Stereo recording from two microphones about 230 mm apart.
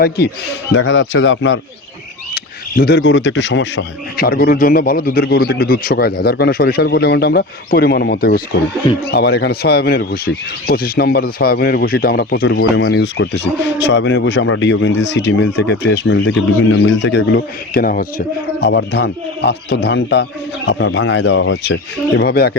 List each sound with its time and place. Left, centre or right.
0.7 s speech: left
2.3 s speech: left
12.5 s speech: left